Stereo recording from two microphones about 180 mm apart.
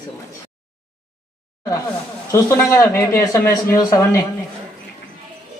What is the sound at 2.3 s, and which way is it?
A man's voice, 15° left (ahead or behind).